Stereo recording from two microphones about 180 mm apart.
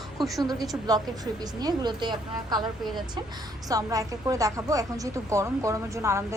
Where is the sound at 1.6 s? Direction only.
25° right (ahead or behind).